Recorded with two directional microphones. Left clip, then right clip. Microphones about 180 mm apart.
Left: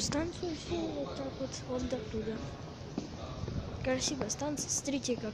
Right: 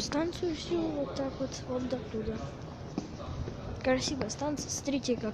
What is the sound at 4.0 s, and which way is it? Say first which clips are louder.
Speech: right 1 dB; centre (ahead or behind).